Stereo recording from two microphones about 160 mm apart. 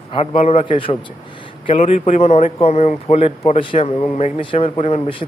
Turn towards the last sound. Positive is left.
turn(degrees=35)  # may be behind; listen again after turning